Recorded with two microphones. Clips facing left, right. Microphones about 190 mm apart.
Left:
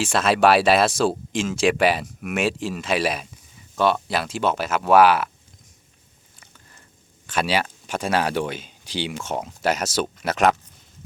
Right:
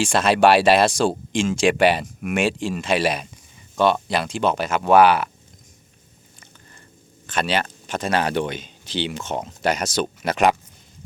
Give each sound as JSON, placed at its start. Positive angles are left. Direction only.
{"t": 0.0, "sound": "speech", "side_deg": 0}
{"t": 6.4, "sound": "biting", "side_deg": 5}
{"t": 7.3, "sound": "speech", "side_deg": 5}